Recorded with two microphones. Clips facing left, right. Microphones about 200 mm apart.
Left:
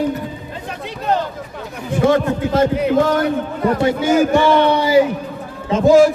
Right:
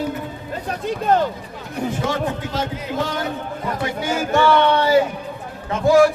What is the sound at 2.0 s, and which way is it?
A man's voice, 60° left (ahead or behind).